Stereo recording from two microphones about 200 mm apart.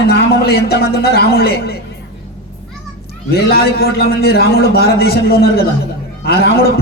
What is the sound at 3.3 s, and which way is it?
A man's voice, 50° left (ahead or behind).